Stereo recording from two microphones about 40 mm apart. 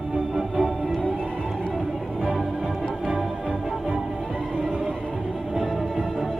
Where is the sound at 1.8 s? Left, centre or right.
Centre.